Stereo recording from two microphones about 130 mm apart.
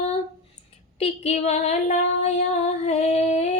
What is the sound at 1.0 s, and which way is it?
Female singing, 60° left (ahead or behind).